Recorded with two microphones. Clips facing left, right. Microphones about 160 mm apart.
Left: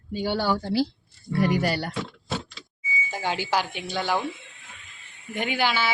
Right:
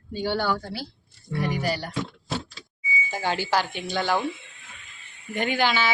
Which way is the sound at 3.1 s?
10° left (ahead or behind).